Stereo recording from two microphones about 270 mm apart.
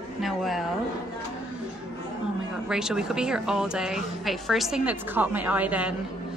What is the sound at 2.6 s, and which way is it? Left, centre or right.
A woman's voice, centre.